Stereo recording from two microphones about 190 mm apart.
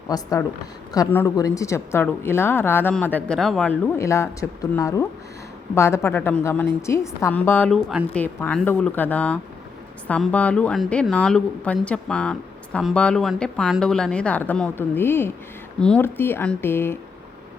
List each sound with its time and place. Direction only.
0.1 s a woman's voice: 15° left (ahead or behind)